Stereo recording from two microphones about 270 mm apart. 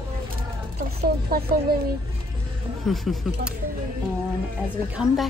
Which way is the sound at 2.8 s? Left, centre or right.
Centre.